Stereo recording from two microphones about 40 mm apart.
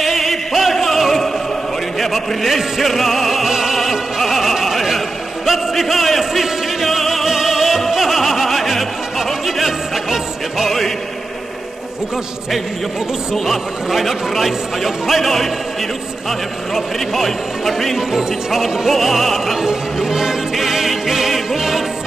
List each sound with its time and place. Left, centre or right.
0.0 s music: centre
13.5 s speech: centre
19.6 s music: centre